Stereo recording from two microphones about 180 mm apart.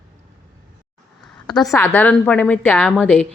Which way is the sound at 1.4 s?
Centre (ahead or behind).